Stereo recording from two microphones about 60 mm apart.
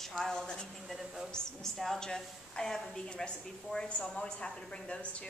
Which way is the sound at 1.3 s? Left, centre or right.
Centre.